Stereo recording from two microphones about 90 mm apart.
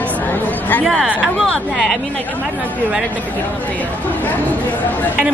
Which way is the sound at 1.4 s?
Centre (ahead or behind).